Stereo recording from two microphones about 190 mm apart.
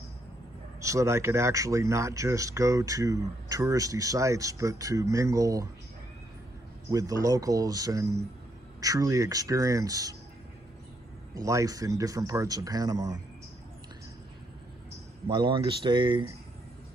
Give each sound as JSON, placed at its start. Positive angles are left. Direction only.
{"t": 0.7, "sound": "speech", "side_deg": -15}
{"t": 6.9, "sound": "speech", "side_deg": -20}
{"t": 11.3, "sound": "speech", "side_deg": -15}
{"t": 15.2, "sound": "speech", "side_deg": -25}